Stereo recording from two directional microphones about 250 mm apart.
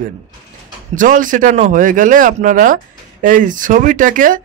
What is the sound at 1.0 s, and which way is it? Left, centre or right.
Speech, right.